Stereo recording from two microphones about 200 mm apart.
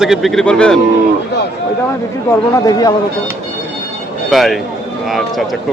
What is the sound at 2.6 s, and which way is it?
Speech, 20° left (ahead or behind).